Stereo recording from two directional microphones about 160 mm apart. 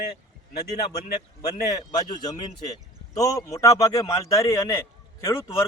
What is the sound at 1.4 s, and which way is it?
A man's voice, 25° left (ahead or behind).